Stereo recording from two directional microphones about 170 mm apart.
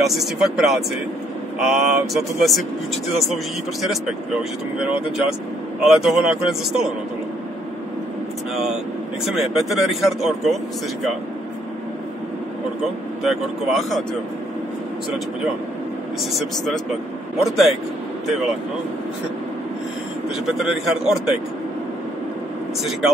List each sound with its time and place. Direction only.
0.0 s speech: centre (ahead or behind)
3.8 s speech: centre (ahead or behind)
9.2 s speech: centre (ahead or behind)
13.2 s speech: centre (ahead or behind)
16.3 s speech: 5° left (ahead or behind)
20.4 s speech: centre (ahead or behind)